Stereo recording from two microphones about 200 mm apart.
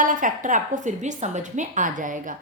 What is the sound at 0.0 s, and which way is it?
A woman's voice, 40° right (ahead or behind).